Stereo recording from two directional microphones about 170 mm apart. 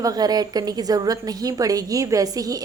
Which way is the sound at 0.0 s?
20° right (ahead or behind).